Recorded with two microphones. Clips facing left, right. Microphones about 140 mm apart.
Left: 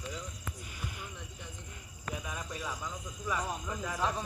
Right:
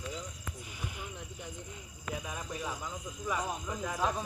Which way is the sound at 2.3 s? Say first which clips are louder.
Right 1 dB; 20° right (ahead or behind).